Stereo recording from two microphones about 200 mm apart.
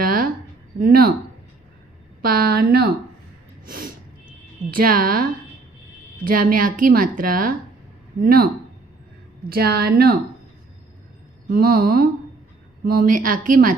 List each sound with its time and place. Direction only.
0.0 s a sound: 45° right (ahead or behind)
0.8 s a woman's voice: 45° right (ahead or behind)
2.2 s a woman's voice: 45° right (ahead or behind)
9.5 s a woman's voice: 50° right (ahead or behind)
11.5 s a woman's voice: 45° right (ahead or behind)